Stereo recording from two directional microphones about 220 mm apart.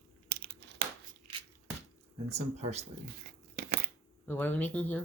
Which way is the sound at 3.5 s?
40° right (ahead or behind).